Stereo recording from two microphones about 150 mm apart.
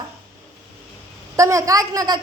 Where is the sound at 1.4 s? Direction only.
20° right (ahead or behind).